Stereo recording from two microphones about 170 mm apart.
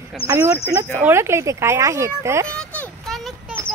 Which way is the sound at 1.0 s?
15° right (ahead or behind).